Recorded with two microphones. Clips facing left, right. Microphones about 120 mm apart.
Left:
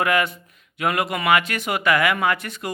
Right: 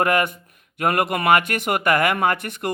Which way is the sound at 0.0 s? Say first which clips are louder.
Right 1 dB; 50° right (ahead or behind).